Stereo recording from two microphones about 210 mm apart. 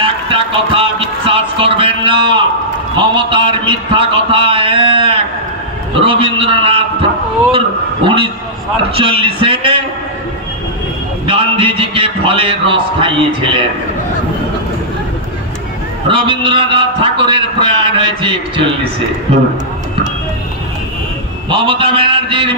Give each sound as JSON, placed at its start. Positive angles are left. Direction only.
{"t": 0.0, "sound": "a man's voice", "side_deg": -25}
{"t": 11.2, "sound": "a man's voice", "side_deg": -25}
{"t": 16.1, "sound": "a man's voice", "side_deg": -25}
{"t": 21.5, "sound": "a man's voice", "side_deg": -25}